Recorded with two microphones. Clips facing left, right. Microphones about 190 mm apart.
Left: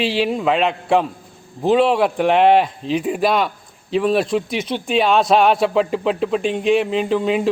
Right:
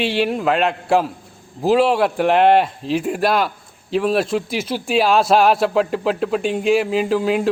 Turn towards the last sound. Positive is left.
turn(degrees=0)  # may be behind; listen again after turning